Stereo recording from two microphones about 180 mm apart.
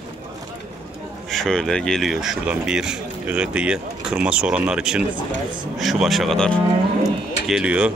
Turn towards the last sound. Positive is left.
turn(degrees=-5)  # may be behind; listen again after turning